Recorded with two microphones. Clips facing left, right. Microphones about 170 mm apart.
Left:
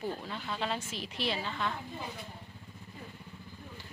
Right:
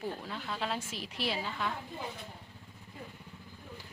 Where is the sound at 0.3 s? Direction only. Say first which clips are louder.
Left 1 dB; centre (ahead or behind).